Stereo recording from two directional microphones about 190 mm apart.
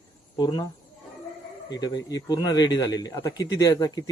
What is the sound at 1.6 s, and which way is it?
Speech, 20° left (ahead or behind).